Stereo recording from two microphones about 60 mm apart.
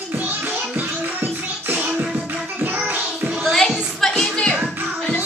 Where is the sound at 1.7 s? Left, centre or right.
Right.